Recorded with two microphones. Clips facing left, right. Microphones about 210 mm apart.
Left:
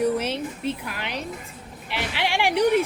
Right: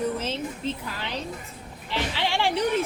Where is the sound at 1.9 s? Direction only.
15° left (ahead or behind).